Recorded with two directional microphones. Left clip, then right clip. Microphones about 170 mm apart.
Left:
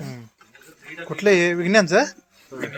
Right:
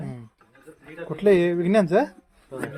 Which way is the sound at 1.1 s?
5° right (ahead or behind).